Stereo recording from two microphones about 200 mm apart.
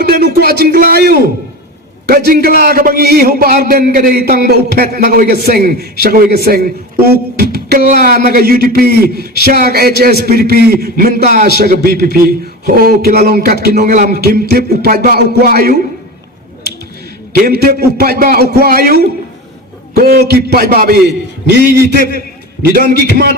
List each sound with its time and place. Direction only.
0.0 s a man's voice: 50° right (ahead or behind)
7.1 s a sound: 50° right (ahead or behind)
8.0 s a man's voice: 45° right (ahead or behind)
17.3 s a man's voice: 50° right (ahead or behind)